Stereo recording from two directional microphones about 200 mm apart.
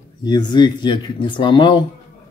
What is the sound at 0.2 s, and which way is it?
Speech, 20° left (ahead or behind).